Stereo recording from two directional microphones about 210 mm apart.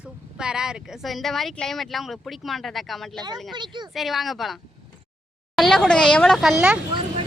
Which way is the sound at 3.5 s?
20° right (ahead or behind).